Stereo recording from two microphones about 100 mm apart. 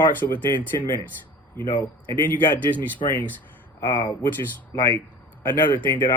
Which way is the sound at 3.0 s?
90° left.